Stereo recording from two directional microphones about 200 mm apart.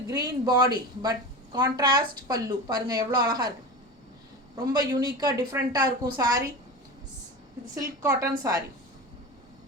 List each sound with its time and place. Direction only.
0.1 s a woman's voice: 20° right (ahead or behind)
4.5 s a woman's voice: 20° right (ahead or behind)
8.2 s a woman's voice: 15° right (ahead or behind)